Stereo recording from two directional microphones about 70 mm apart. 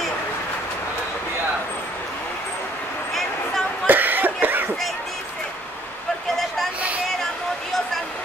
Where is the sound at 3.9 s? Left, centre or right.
Right.